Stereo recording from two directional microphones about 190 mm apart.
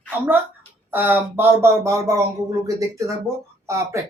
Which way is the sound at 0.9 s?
10° right (ahead or behind).